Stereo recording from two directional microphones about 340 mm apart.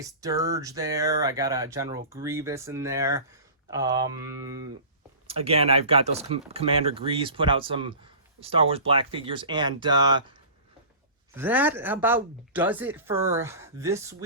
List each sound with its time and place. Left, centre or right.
0.0 s speech: centre
11.3 s speech: centre